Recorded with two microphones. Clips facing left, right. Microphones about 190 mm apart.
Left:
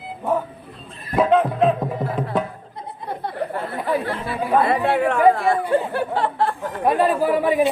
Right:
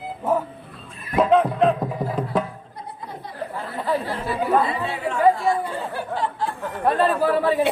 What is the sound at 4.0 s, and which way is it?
Speech, 65° left (ahead or behind).